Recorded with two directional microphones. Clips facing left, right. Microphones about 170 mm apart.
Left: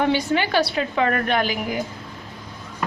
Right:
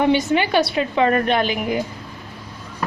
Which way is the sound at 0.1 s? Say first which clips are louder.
Right 3 dB; 20° right (ahead or behind).